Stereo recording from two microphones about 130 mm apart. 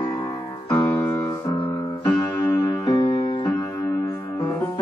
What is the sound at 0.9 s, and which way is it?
Music, 15° left (ahead or behind).